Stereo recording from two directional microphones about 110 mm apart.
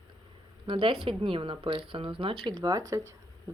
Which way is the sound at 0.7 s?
60° right (ahead or behind).